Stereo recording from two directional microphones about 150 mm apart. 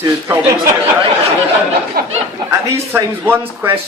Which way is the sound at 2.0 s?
90° right.